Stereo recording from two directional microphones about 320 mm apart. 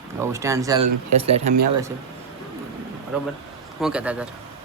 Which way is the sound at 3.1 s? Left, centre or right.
Centre.